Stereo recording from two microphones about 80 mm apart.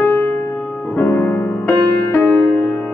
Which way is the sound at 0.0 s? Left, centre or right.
Left.